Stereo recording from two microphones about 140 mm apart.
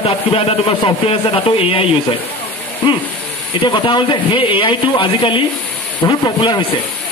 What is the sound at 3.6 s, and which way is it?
A man's voice, 35° left (ahead or behind).